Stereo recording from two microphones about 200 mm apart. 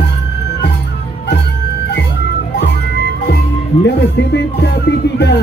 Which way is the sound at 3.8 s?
60° left (ahead or behind).